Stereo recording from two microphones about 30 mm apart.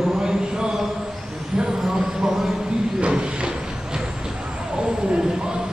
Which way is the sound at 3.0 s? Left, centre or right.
Right.